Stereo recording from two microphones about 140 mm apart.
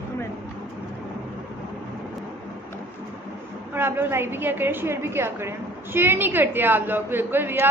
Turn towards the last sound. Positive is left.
turn(degrees=-15)  # may be behind; listen again after turning